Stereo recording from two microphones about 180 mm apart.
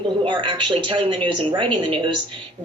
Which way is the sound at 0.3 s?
25° right (ahead or behind).